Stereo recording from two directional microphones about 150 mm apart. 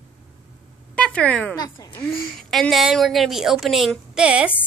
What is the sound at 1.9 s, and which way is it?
A woman's voice, centre (ahead or behind).